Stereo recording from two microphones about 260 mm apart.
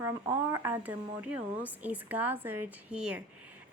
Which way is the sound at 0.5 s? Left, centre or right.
Centre.